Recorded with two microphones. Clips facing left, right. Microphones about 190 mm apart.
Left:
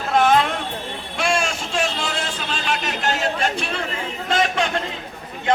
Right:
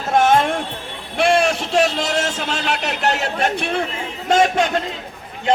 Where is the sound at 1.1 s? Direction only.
60° right (ahead or behind).